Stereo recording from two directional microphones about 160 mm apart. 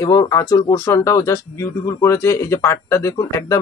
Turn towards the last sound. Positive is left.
turn(degrees=20)  # may be behind; listen again after turning